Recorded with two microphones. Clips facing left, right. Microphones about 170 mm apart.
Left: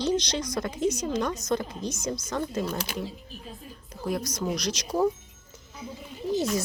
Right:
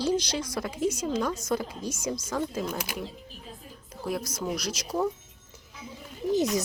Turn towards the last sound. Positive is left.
turn(degrees=-15)  # may be behind; listen again after turning